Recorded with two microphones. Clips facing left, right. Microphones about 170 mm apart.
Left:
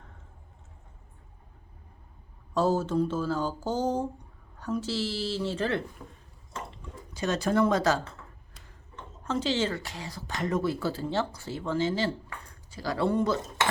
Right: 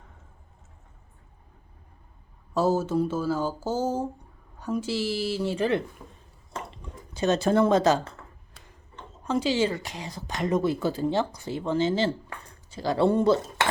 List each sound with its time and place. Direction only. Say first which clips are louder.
2.5 s speech: right 2 dB; 10° right (ahead or behind)
6.7 s speech: right 1 dB; 25° right (ahead or behind)
9.2 s speech: right 4 dB; 10° right (ahead or behind); by 13.4 s 30° right (ahead or behind)